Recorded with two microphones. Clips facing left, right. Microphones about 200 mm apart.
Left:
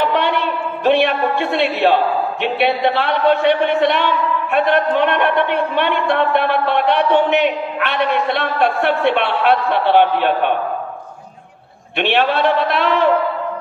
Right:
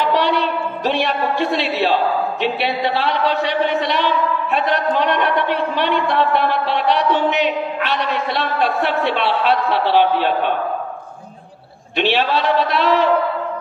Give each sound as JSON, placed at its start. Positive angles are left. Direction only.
{"t": 0.1, "sound": "a sound", "side_deg": 55}
{"t": 2.4, "sound": "speech", "side_deg": 55}
{"t": 12.0, "sound": "speech", "side_deg": 55}